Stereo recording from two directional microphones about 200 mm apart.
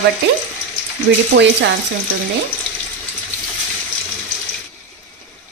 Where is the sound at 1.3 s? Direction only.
60° right (ahead or behind).